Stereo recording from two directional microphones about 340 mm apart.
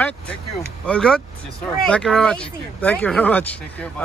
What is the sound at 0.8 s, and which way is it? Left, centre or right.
Speech, centre.